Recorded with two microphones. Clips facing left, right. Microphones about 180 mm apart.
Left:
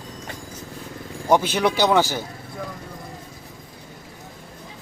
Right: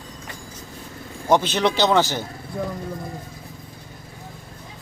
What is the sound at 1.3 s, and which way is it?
Speech, 10° left (ahead or behind).